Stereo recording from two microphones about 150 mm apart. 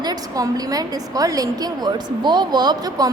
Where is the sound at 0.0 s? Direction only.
25° right (ahead or behind).